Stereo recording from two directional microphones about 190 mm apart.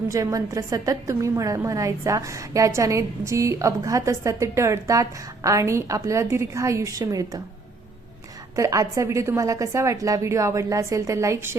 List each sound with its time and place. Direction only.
0.1 s a woman's voice: 15° right (ahead or behind)
8.5 s a woman's voice: 15° right (ahead or behind)